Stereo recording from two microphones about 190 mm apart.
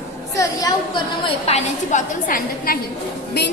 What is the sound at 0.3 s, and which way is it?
A woman's voice, 20° left (ahead or behind).